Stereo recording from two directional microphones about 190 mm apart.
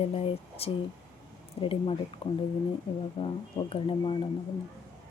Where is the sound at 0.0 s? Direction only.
30° left (ahead or behind).